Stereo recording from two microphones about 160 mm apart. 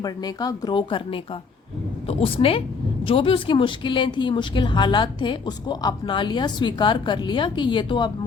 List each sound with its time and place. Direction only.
0.0 s speech: 25° left (ahead or behind)